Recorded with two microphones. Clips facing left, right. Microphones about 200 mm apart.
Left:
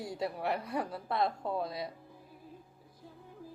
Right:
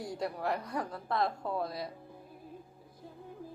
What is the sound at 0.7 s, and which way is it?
Speech, 25° left (ahead or behind).